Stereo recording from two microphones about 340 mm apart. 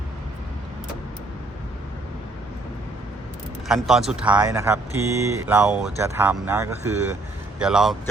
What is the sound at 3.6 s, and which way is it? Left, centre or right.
Speech, centre.